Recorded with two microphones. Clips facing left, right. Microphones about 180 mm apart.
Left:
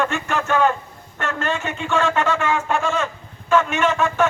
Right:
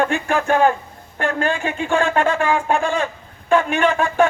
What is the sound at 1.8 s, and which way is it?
A man's voice, 50° right (ahead or behind).